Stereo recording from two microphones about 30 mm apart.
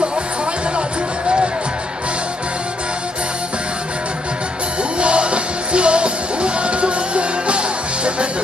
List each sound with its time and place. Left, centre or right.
4.8 s music: right